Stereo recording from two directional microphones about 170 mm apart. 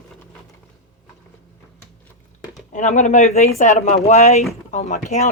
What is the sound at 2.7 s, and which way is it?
Speech, 45° left (ahead or behind).